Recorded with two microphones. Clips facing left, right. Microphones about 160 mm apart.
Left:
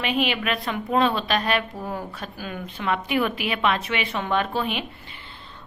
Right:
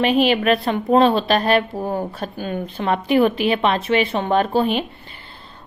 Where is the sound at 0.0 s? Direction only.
35° right (ahead or behind).